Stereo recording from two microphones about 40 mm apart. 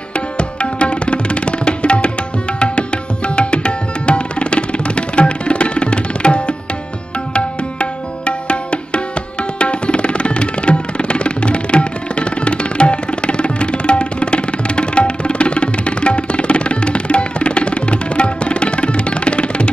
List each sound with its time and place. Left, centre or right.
0.4 s tabla: left
7.3 s music: left